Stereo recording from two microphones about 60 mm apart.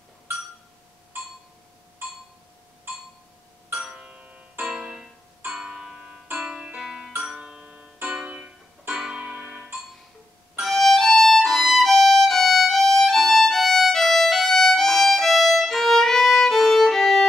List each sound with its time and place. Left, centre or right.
3.7 s music: centre
8.9 s music: centre
9.2 s music: centre
10.6 s violin: centre